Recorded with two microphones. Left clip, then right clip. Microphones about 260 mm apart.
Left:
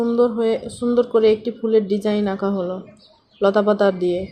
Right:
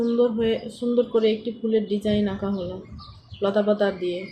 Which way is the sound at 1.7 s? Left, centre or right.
Left.